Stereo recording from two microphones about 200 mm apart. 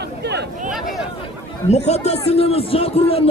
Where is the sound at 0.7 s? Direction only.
Centre (ahead or behind).